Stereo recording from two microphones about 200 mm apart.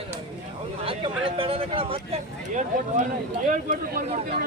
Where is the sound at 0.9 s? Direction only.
25° right (ahead or behind).